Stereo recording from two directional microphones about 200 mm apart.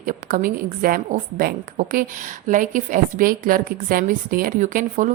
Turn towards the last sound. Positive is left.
turn(degrees=-40)  # may be behind; listen again after turning